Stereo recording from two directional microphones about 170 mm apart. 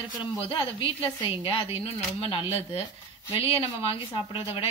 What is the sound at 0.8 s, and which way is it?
Speech, 30° left (ahead or behind).